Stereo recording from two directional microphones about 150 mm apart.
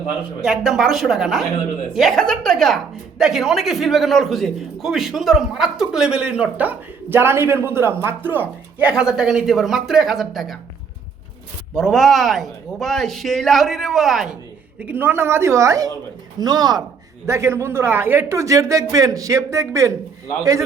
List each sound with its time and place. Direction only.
0.4 s a woman's voice: centre (ahead or behind)
11.7 s a woman's voice: 5° left (ahead or behind)
14.8 s a woman's voice: 10° right (ahead or behind)